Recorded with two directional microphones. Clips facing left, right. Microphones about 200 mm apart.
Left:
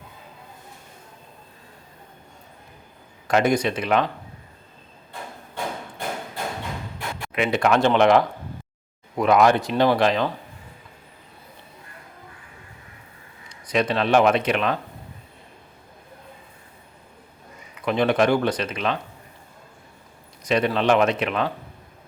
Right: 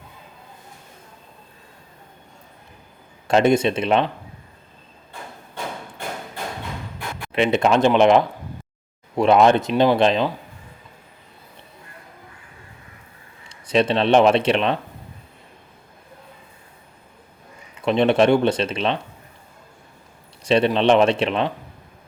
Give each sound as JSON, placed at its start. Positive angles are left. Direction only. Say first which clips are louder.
{"t": 3.2, "sound": "speech", "louder": "right 4 dB", "side_deg": -25}
{"t": 7.3, "sound": "speech", "louder": "right 3 dB", "side_deg": -25}
{"t": 13.5, "sound": "speech", "louder": "right 4 dB", "side_deg": -25}
{"t": 17.8, "sound": "speech", "louder": "right 3 dB", "side_deg": -25}
{"t": 20.4, "sound": "speech", "louder": "right 4 dB", "side_deg": -30}